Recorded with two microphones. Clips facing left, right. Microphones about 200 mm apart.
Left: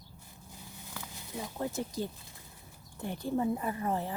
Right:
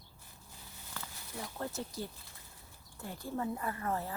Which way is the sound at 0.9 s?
15° left (ahead or behind).